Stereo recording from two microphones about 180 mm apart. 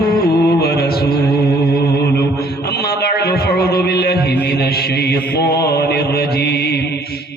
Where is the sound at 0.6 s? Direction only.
60° left (ahead or behind).